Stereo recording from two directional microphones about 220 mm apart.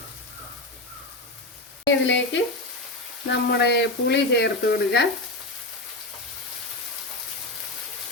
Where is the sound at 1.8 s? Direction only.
55° left (ahead or behind).